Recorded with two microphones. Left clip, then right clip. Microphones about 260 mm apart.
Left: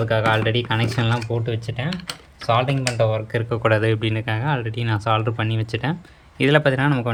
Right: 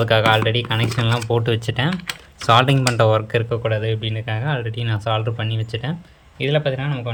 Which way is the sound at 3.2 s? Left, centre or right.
Centre.